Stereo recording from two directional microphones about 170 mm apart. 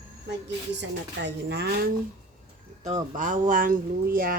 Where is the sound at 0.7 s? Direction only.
90° right; by 1.9 s 65° right (ahead or behind).